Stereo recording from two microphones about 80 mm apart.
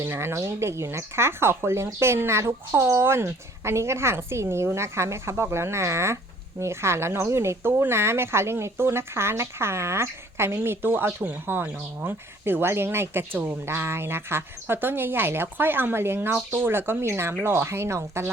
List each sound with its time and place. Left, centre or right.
0.0 s speech: right